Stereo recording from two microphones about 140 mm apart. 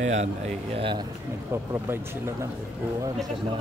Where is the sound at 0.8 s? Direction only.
35° right (ahead or behind).